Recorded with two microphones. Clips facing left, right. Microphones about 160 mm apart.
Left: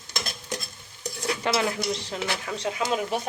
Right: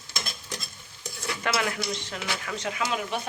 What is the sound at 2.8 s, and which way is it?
Speech, 40° left (ahead or behind).